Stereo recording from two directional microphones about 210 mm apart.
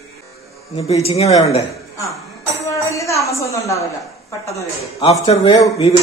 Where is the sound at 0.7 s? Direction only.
30° left (ahead or behind).